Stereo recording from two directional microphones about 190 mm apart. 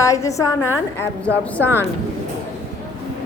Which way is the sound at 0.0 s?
15° left (ahead or behind).